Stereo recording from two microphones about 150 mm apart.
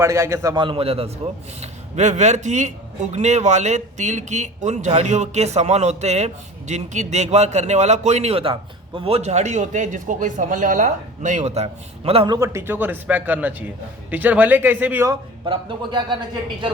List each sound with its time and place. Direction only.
0.0 s a man's voice: 20° right (ahead or behind); by 12.3 s 40° right (ahead or behind)
12.3 s speech: 20° right (ahead or behind)
15.1 s a man's voice: 30° right (ahead or behind)